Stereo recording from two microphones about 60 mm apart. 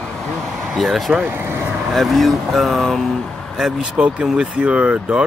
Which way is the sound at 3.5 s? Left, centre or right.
Centre.